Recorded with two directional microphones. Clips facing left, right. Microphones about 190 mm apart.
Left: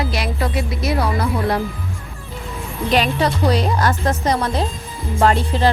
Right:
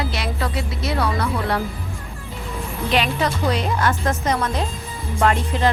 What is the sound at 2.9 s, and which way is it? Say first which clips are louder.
Speech: left 3 dB; 40° left (ahead or behind).